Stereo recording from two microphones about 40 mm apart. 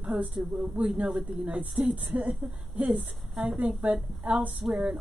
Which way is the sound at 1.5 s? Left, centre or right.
Right.